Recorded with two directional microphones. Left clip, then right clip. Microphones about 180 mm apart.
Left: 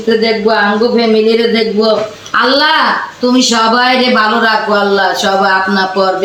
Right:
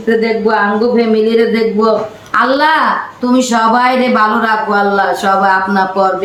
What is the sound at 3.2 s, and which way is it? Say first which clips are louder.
Speech: left 1 dB; 15° right (ahead or behind).